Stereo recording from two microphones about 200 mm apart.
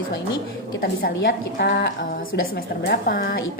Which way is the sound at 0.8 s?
50° left (ahead or behind).